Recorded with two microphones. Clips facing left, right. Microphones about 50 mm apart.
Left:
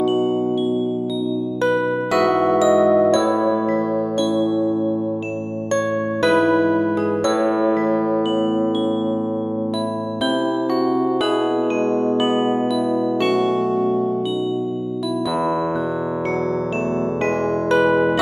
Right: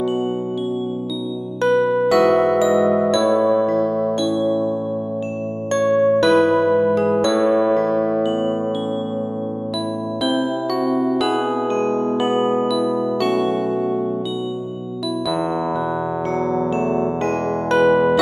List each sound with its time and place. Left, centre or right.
1.6 s music: centre
5.8 s music: centre
10.3 s music: centre
11.1 s music: centre
11.8 s music: right
12.2 s music: left
17.7 s music: centre